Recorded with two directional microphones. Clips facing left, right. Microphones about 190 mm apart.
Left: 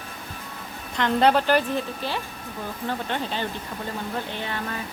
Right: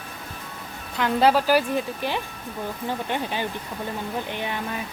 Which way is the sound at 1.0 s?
5° right (ahead or behind).